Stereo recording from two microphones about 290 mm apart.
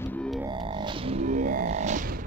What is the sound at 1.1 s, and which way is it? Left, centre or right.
Whale vocalization, right.